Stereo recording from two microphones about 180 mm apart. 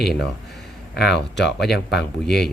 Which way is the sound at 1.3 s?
70° left (ahead or behind).